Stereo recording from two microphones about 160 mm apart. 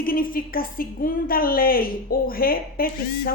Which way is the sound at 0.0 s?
65° left (ahead or behind).